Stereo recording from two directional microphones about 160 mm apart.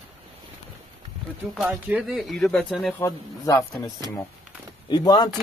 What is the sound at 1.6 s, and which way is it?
Speech, 10° right (ahead or behind).